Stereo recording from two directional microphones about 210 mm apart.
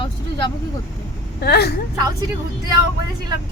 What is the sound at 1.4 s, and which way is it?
Speech, 50° left (ahead or behind).